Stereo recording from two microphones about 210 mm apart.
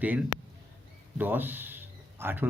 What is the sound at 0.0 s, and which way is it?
Speech, 5° right (ahead or behind).